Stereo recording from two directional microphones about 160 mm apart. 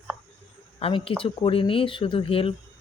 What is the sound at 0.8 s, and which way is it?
Speech, 35° left (ahead or behind).